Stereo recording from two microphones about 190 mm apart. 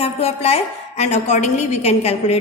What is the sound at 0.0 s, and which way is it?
A woman's voice, 30° left (ahead or behind).